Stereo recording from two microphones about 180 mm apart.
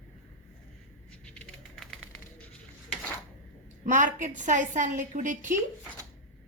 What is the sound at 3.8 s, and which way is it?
A woman's voice, 45° right (ahead or behind).